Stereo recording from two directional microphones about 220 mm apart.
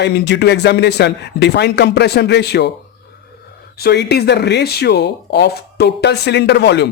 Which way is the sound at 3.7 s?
45° left (ahead or behind).